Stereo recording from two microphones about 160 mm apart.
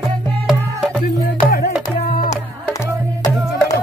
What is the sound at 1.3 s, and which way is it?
Music, 60° left (ahead or behind).